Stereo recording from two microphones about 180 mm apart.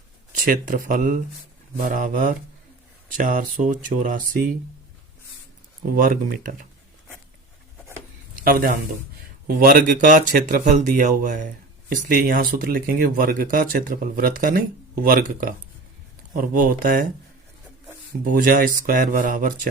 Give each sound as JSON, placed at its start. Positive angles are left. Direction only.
{"t": 0.4, "sound": "speech", "side_deg": -50}
{"t": 5.8, "sound": "speech", "side_deg": -50}
{"t": 9.5, "sound": "speech", "side_deg": -55}
{"t": 18.3, "sound": "speech", "side_deg": -50}